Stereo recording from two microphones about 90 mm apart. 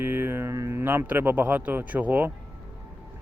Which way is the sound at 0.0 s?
20° right (ahead or behind).